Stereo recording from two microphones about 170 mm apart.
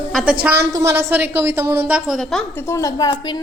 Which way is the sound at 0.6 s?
15° right (ahead or behind).